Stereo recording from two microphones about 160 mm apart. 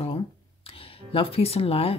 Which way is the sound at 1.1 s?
35° left (ahead or behind).